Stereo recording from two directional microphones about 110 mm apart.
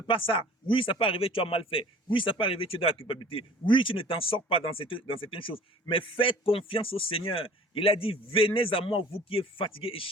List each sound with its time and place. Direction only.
0.1 s speech: 50° left (ahead or behind)